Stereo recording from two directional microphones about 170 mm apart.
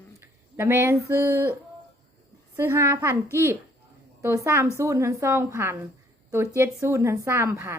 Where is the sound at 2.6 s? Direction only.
15° right (ahead or behind).